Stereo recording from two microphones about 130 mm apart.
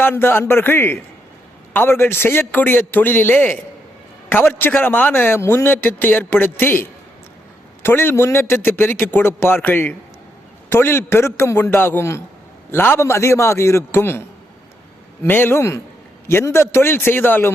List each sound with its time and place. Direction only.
0.0 s a man's voice: 15° left (ahead or behind)